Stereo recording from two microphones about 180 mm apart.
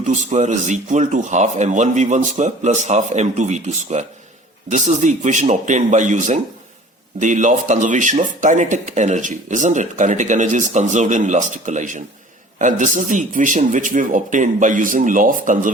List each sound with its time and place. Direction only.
0.0 s speech: 40° right (ahead or behind)